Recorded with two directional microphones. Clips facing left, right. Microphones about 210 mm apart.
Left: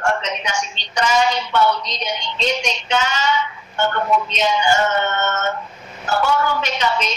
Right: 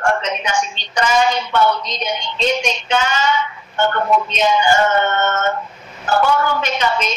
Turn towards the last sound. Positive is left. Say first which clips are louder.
# right 2 dB
turn(degrees=-50)  # may be behind; listen again after turning